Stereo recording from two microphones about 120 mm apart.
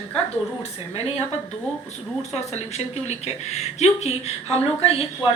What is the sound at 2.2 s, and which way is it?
A woman's voice, 65° left (ahead or behind).